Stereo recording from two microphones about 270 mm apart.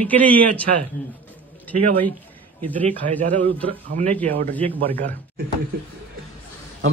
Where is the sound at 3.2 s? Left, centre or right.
Right.